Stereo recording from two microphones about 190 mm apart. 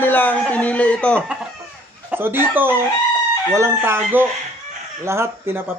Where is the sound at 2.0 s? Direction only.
10° right (ahead or behind).